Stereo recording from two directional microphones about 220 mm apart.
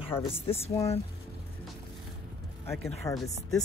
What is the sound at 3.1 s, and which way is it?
Speech, 15° left (ahead or behind).